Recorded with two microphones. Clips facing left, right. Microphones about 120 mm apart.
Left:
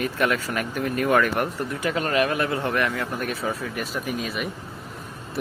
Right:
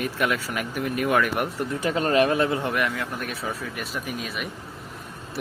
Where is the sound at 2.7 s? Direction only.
5° right (ahead or behind).